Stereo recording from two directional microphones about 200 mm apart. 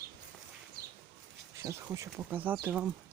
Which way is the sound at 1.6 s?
15° right (ahead or behind).